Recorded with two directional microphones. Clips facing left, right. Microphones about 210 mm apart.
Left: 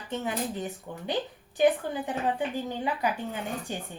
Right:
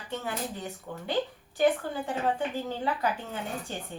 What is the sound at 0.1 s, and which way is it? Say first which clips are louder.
Speech: left 3 dB; 20° left (ahead or behind).